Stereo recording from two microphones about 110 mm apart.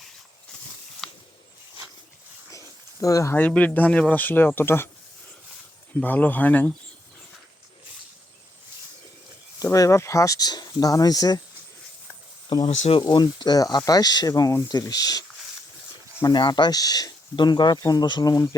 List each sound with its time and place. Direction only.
1.0 s a sound: 5° left (ahead or behind)
2.5 s a sound: 30° left (ahead or behind)
3.3 s speech: 15° left (ahead or behind)
5.9 s speech: 15° left (ahead or behind)
9.7 s speech: 30° left (ahead or behind)
12.6 s speech: 80° left
13.0 s speech: 45° left (ahead or behind)
16.2 s speech: 40° left (ahead or behind)